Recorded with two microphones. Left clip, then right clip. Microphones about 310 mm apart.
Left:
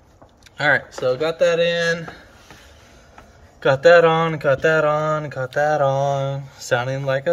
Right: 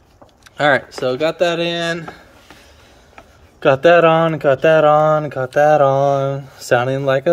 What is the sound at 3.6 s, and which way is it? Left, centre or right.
Speech, right.